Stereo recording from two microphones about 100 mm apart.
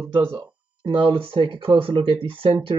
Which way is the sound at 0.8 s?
55° right (ahead or behind).